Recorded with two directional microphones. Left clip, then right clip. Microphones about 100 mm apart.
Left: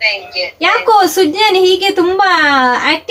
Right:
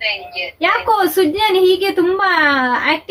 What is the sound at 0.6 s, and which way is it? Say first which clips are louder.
Speech: left 5 dB; 25° left (ahead or behind).